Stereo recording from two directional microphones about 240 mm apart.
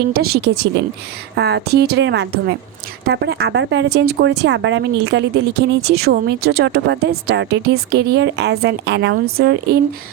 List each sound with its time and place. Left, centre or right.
0.1 s speech: right